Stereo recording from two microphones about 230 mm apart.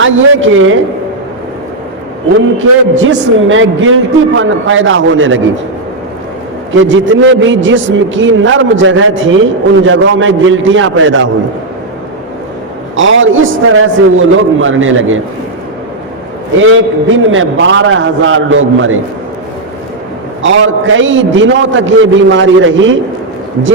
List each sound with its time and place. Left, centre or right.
0.0 s a man's voice: right
3.0 s a man's voice: right
6.7 s a man's voice: right
13.0 s a man's voice: right
16.6 s a man's voice: right
20.4 s a man's voice: right